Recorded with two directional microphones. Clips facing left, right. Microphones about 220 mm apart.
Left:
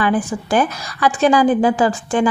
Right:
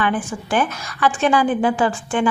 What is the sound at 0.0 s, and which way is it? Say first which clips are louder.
A woman's voice: left 4 dB; 40° left (ahead or behind).